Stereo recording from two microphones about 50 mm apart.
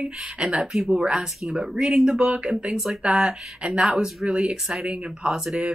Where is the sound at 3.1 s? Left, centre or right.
Centre.